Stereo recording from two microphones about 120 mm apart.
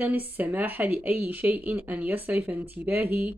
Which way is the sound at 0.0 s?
15° right (ahead or behind).